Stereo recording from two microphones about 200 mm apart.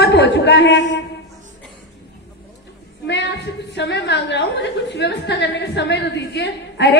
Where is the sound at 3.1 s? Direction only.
60° left (ahead or behind).